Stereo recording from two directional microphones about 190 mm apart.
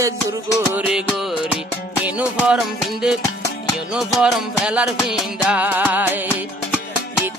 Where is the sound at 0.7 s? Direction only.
5° right (ahead or behind).